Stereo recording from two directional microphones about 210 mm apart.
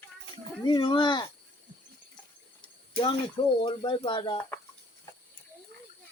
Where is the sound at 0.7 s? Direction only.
20° left (ahead or behind).